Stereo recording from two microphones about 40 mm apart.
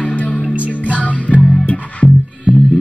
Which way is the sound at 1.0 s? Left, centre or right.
Left.